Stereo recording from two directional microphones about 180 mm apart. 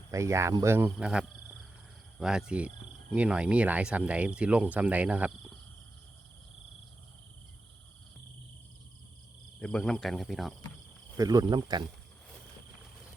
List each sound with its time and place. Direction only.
0.1 s speech: 15° right (ahead or behind)
9.6 s speech: 5° left (ahead or behind)
11.2 s speech: 20° right (ahead or behind)